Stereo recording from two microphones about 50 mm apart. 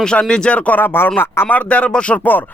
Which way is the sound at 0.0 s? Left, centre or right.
Centre.